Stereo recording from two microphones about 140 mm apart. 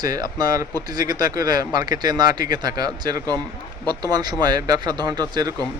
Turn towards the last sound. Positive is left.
turn(degrees=-30)  # may be behind; listen again after turning